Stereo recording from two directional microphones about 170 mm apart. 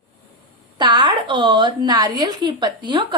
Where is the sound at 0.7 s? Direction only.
25° right (ahead or behind).